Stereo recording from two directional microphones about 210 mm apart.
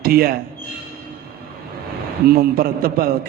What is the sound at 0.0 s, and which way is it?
Speech, 45° right (ahead or behind).